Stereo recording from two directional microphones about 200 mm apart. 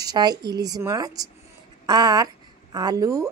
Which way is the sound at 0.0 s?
20° right (ahead or behind).